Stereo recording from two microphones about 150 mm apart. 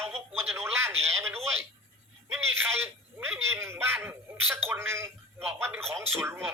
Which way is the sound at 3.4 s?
15° right (ahead or behind).